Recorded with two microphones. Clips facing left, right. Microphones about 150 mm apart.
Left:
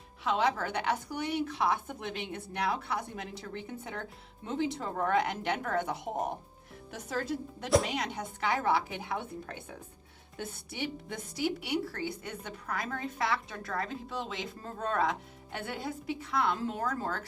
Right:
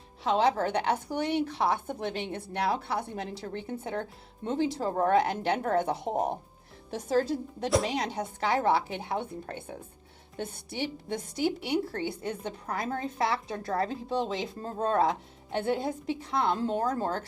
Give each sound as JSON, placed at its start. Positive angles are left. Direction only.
{"t": 0.3, "sound": "a woman's voice", "side_deg": -30}